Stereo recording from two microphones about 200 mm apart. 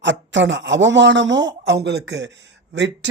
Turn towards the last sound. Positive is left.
turn(degrees=-60)  # may be behind; listen again after turning